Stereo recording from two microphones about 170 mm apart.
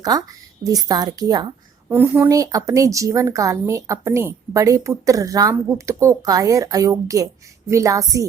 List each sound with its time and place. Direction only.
0.0 s speech: 20° right (ahead or behind)
1.9 s speech: 10° right (ahead or behind)